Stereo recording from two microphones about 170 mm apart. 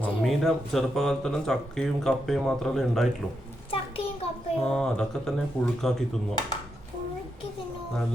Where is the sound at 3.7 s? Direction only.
35° left (ahead or behind).